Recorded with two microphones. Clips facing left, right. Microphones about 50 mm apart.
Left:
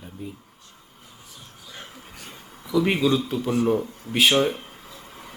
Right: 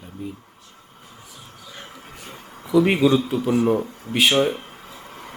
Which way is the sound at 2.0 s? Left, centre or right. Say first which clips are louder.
Right 3 dB; right.